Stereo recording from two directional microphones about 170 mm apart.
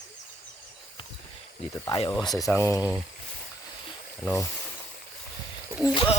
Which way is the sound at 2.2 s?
20° left (ahead or behind).